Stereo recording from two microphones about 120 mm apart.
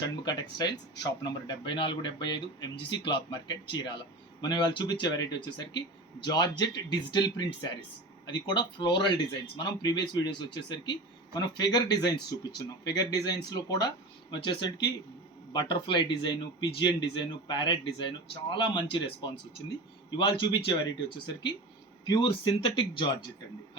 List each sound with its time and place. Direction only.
0.0 s speech: 35° left (ahead or behind)